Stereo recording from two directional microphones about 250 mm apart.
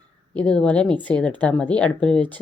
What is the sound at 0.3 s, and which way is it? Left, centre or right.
Speech, centre.